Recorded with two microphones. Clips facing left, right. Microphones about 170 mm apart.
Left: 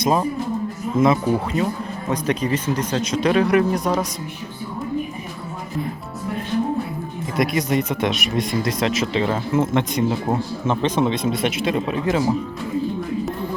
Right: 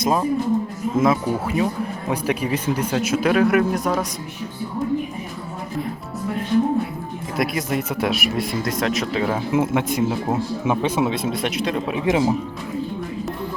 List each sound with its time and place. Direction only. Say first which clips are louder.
0.0 s speech: even; centre (ahead or behind)
7.3 s speech: left 3 dB; centre (ahead or behind)
12.0 s speech: right 2 dB; 20° right (ahead or behind)